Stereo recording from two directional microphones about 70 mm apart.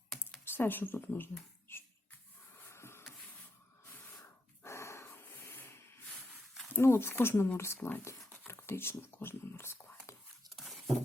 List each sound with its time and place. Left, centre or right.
0.5 s speech: left
2.6 s a sound: left
4.6 s dog: left
6.8 s speech: left
8.3 s whispering: left
10.5 s a sound: centre